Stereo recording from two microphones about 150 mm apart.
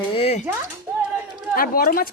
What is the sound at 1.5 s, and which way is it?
Speech, 75° left (ahead or behind).